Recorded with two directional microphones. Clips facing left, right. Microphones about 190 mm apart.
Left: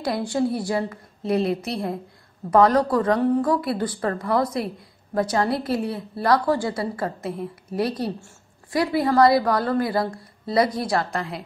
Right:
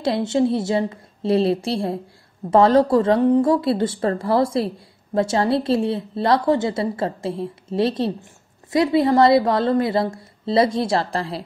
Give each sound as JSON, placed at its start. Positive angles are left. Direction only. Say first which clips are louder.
{"t": 0.0, "sound": "a woman's voice", "louder": "right 4 dB", "side_deg": -25}